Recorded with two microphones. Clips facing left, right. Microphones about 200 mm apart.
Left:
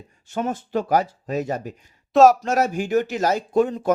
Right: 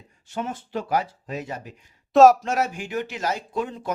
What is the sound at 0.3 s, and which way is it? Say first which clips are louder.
Speech: left 5 dB; 45° left (ahead or behind).